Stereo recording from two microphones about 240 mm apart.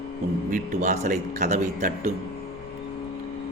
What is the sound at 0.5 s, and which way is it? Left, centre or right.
A man's voice, right.